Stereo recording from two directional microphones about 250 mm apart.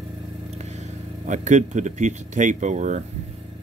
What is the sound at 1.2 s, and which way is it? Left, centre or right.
Speech, right.